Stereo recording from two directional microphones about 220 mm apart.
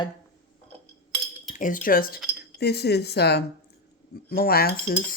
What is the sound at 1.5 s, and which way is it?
Speech, 35° left (ahead or behind).